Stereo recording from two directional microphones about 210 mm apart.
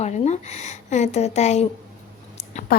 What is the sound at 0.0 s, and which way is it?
A woman's voice, 35° left (ahead or behind).